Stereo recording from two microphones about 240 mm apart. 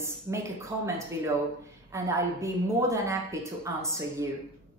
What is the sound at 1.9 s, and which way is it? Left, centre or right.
Speech, centre.